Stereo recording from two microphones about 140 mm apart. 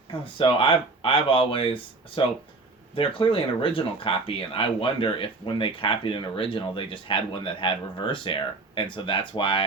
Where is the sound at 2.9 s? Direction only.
40° left (ahead or behind).